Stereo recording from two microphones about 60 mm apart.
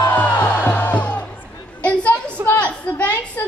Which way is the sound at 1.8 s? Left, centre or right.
Left.